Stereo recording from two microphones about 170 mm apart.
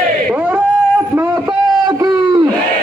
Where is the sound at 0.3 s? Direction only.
10° right (ahead or behind).